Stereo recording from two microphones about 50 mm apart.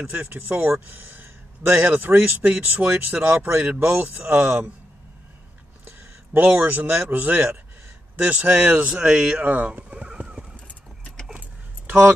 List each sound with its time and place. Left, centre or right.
0.0 s a man's voice: right
3.6 s speech: right
6.3 s speech: right; by 9.4 s centre
9.4 s bird: right